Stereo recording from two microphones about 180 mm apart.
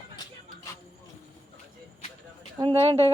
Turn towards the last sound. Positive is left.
turn(degrees=-30)  # may be behind; listen again after turning